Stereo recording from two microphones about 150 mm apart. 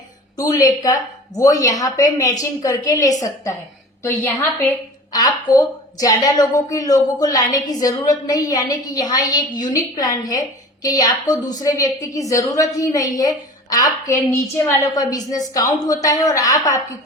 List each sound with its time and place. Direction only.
0.3 s a woman's voice: 25° left (ahead or behind)
5.1 s a woman's voice: 25° left (ahead or behind)